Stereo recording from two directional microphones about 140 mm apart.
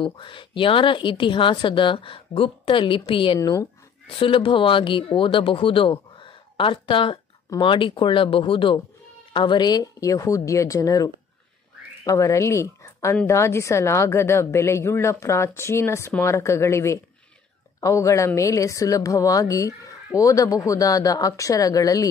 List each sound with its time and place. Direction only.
0.0 s a woman's voice: 35° left (ahead or behind)
3.3 s a woman's voice: 20° left (ahead or behind)
4.2 s a woman's voice: 40° left (ahead or behind)